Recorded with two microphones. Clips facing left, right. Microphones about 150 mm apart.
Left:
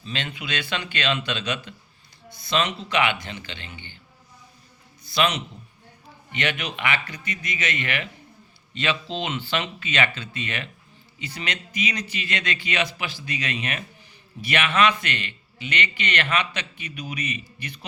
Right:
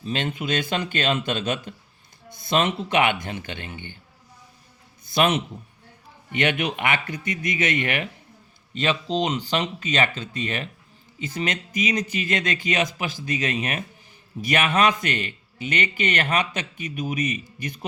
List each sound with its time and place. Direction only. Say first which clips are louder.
0.0 s a man's voice: right 6 dB; 45° right (ahead or behind)
5.0 s a man's voice: right 3 dB; 50° right (ahead or behind)